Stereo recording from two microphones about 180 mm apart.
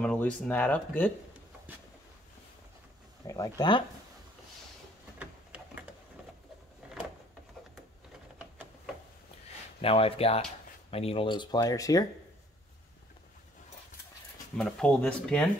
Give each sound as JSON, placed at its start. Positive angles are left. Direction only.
{"t": 0.0, "sound": "speech", "side_deg": 5}
{"t": 3.3, "sound": "speech", "side_deg": 20}
{"t": 5.2, "sound": "a sound", "side_deg": -5}
{"t": 9.8, "sound": "speech", "side_deg": 30}
{"t": 14.6, "sound": "speech", "side_deg": 5}